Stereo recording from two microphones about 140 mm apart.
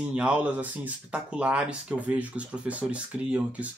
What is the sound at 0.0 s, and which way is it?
Speech, 10° right (ahead or behind).